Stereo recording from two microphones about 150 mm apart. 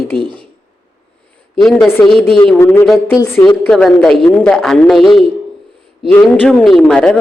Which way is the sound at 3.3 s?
10° left (ahead or behind).